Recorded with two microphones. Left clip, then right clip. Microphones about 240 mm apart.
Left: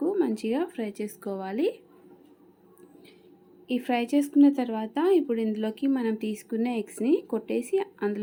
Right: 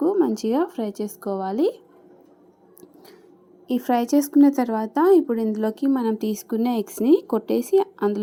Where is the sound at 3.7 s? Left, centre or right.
Centre.